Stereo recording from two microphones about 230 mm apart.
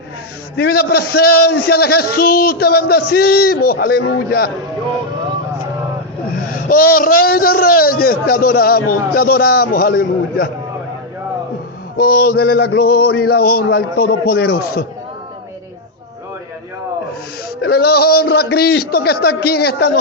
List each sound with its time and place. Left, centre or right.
0.5 s a man's voice: left
6.7 s a man's voice: left
11.9 s a man's voice: left
17.6 s a man's voice: left